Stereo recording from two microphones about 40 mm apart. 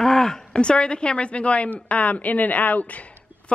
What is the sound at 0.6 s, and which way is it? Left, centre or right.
A woman's voice, left.